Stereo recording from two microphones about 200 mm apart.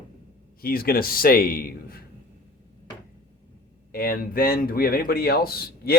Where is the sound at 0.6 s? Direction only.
50° left (ahead or behind).